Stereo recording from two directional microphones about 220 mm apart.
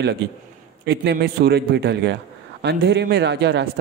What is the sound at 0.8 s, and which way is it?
A man's voice, 50° right (ahead or behind).